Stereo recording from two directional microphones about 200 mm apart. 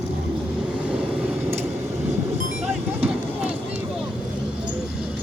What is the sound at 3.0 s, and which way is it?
Vehicle, 5° right (ahead or behind).